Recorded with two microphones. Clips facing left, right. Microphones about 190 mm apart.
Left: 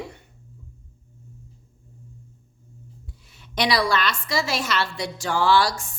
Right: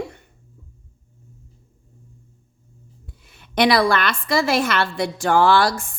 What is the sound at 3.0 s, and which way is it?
A woman's voice, 55° right (ahead or behind).